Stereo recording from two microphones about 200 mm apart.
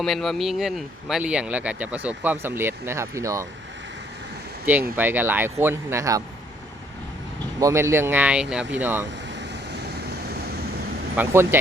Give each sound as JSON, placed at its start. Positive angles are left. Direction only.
{"t": 0.0, "sound": "speech", "side_deg": 0}
{"t": 4.6, "sound": "speech", "side_deg": -10}
{"t": 7.6, "sound": "speech", "side_deg": -15}
{"t": 9.0, "sound": "a sound", "side_deg": -60}
{"t": 11.2, "sound": "speech", "side_deg": -10}